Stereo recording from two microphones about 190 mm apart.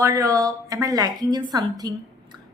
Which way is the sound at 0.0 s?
15° right (ahead or behind).